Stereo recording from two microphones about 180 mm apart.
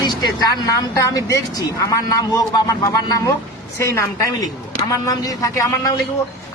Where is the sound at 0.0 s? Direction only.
25° left (ahead or behind).